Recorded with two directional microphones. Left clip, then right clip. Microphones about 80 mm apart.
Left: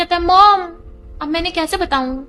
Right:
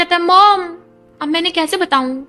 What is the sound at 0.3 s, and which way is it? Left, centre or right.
A woman's voice, right.